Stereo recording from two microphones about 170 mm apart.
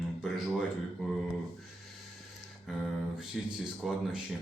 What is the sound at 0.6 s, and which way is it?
Speech, centre (ahead or behind).